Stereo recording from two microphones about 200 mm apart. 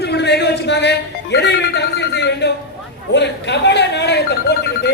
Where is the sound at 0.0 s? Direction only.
55° left (ahead or behind).